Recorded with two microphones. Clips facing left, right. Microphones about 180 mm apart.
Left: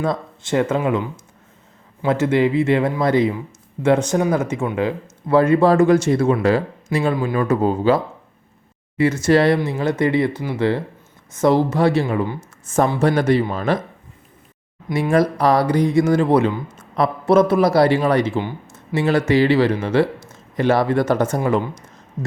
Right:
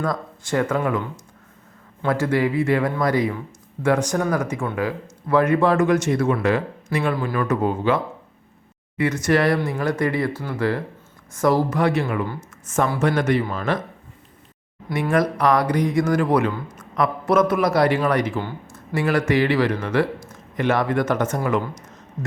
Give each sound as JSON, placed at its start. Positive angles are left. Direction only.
{"t": 0.0, "sound": "speech", "side_deg": 25}
{"t": 2.0, "sound": "speech", "side_deg": 20}
{"t": 15.1, "sound": "speech", "side_deg": 30}